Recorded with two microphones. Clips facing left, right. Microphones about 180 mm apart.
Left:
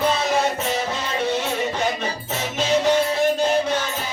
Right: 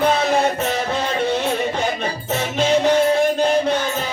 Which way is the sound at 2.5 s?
55° right (ahead or behind).